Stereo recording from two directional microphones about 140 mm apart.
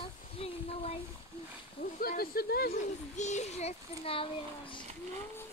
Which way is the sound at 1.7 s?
90° left.